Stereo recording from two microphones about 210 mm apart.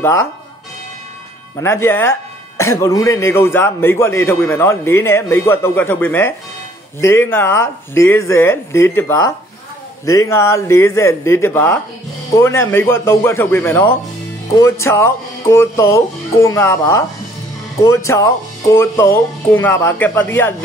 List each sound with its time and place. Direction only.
0.0 s speech: 15° left (ahead or behind)
1.6 s speech: 10° left (ahead or behind)